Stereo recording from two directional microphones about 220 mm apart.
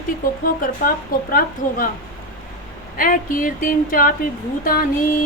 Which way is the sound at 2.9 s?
40° left (ahead or behind).